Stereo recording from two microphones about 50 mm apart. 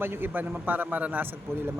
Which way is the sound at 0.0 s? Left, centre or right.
Right.